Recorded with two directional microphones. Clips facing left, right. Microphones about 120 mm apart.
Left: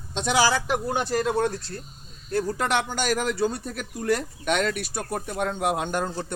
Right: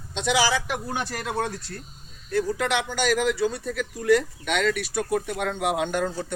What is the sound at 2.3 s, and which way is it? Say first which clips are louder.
Speech: even; 45° left (ahead or behind).